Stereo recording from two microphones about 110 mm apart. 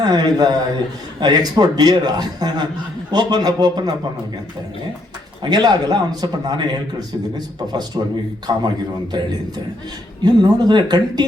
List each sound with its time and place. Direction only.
0.0 s a man's voice: 40° right (ahead or behind)
5.4 s a man's voice: 40° right (ahead or behind)